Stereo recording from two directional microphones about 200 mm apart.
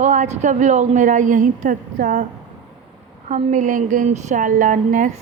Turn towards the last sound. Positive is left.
turn(degrees=-40)  # may be behind; listen again after turning